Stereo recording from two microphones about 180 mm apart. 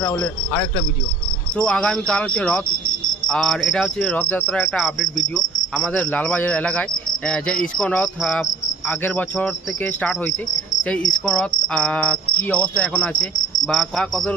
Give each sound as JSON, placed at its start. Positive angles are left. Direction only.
{"t": 1.5, "sound": "cricket", "side_deg": 5}
{"t": 5.7, "sound": "speech", "side_deg": 5}
{"t": 11.3, "sound": "cricket", "side_deg": 5}
{"t": 12.5, "sound": "speech", "side_deg": 5}
{"t": 13.7, "sound": "cricket", "side_deg": 0}